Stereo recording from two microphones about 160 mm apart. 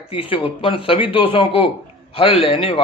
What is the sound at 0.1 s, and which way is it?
A man's voice, 35° left (ahead or behind).